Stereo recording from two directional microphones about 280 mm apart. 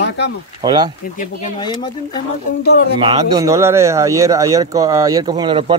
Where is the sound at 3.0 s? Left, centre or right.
Centre.